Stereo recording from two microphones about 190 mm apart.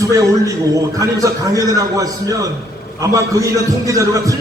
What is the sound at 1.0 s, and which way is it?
A man's voice, 15° right (ahead or behind).